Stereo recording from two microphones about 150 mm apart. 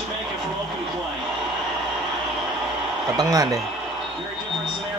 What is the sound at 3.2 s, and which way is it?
Speech, 25° right (ahead or behind).